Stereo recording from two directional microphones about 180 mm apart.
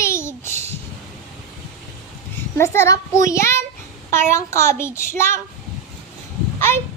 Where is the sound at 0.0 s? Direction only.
15° left (ahead or behind).